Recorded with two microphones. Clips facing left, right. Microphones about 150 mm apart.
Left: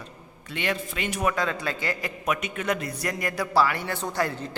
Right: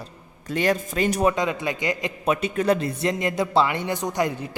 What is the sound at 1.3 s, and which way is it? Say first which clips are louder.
A man's voice: right 3 dB; 20° right (ahead or behind).